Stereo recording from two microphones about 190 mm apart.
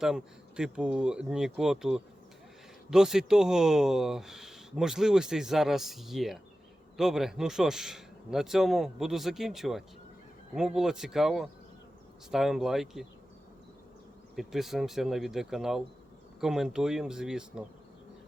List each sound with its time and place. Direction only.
0.0 s speech: 5° right (ahead or behind)
14.3 s speech: centre (ahead or behind)